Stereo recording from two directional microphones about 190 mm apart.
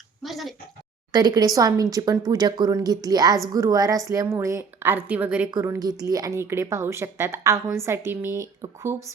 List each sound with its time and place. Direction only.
0.2 s speech: centre (ahead or behind)
1.1 s a woman's voice: 20° right (ahead or behind)